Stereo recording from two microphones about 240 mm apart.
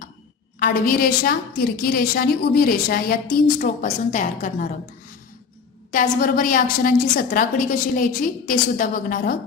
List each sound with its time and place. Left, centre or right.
0.6 s a woman's voice: left
5.9 s a woman's voice: left